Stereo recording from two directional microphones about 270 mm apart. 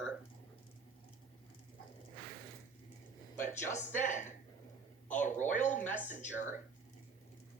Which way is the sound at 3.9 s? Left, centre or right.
Left.